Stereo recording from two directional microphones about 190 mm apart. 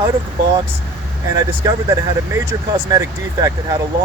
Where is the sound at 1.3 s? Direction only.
15° right (ahead or behind).